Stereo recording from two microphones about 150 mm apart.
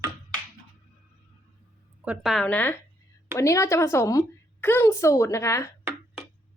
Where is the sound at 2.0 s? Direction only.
5° right (ahead or behind); by 2.7 s 10° left (ahead or behind).